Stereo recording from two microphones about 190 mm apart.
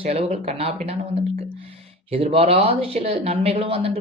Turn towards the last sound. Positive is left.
turn(degrees=-30)  # may be behind; listen again after turning